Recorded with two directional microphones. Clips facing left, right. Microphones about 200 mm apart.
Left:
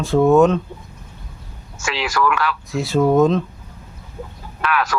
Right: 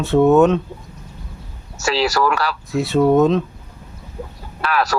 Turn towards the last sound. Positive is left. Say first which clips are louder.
# right 1 dB
turn(degrees=-35)  # may be behind; listen again after turning